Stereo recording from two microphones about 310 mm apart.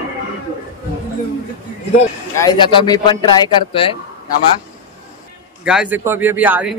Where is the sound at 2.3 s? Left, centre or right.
Centre.